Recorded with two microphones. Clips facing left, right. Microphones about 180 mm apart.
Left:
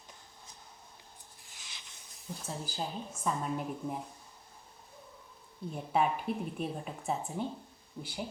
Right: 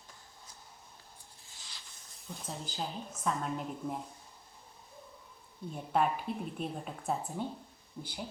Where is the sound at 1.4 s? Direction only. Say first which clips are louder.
Even; 15° left (ahead or behind).